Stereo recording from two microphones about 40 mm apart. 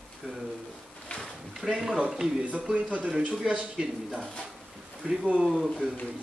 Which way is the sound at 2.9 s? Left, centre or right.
Right.